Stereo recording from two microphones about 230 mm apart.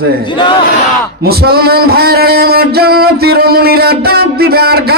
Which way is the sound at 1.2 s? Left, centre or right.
Right.